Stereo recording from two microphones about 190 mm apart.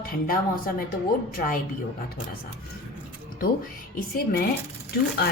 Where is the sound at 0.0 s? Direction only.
50° left (ahead or behind).